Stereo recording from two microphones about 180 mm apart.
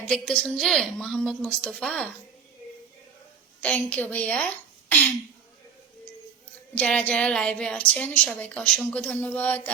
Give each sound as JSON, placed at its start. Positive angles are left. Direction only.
{"t": 0.0, "sound": "a woman's voice", "side_deg": 5}
{"t": 3.6, "sound": "a woman's voice", "side_deg": 10}
{"t": 6.7, "sound": "a woman's voice", "side_deg": 5}